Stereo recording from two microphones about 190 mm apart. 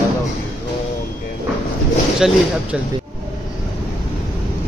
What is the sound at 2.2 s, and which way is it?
Speech, 5° right (ahead or behind).